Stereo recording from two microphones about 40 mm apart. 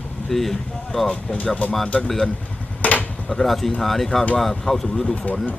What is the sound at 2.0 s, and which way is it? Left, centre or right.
Speech, centre.